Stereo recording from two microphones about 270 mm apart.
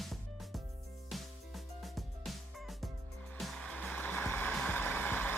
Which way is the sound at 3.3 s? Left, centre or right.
Centre.